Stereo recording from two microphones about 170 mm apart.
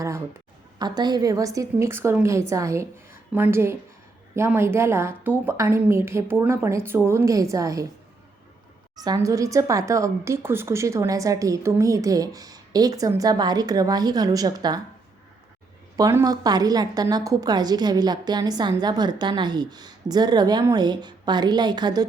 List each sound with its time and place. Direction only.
0.8 s a woman's voice: 25° right (ahead or behind)
9.0 s a woman's voice: 20° right (ahead or behind)
16.0 s a woman's voice: 20° right (ahead or behind)